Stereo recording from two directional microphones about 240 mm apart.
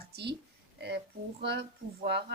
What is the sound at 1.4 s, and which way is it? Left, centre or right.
Speech, right.